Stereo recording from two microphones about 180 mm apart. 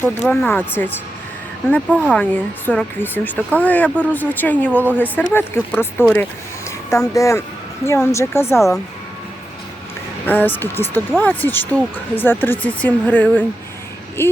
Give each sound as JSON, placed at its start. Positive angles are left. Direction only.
{"t": 0.0, "sound": "speech", "side_deg": 10}
{"t": 1.9, "sound": "speech", "side_deg": -5}
{"t": 2.6, "sound": "speech", "side_deg": 10}
{"t": 8.5, "sound": "speech", "side_deg": 0}
{"t": 10.2, "sound": "speech", "side_deg": 10}